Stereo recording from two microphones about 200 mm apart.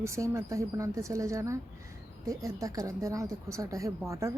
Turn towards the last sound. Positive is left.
turn(degrees=-15)  # may be behind; listen again after turning